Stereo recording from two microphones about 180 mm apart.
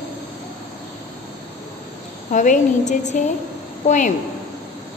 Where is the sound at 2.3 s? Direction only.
45° left (ahead or behind).